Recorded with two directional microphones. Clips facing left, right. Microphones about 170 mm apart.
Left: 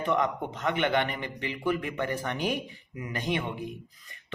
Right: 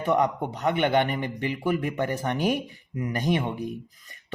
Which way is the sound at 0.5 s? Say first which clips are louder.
Right 4 dB; 35° right (ahead or behind).